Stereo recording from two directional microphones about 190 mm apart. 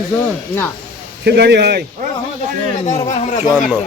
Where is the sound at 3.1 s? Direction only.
40° left (ahead or behind).